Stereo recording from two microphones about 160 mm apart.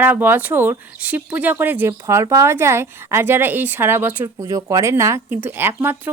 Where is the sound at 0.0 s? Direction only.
10° right (ahead or behind).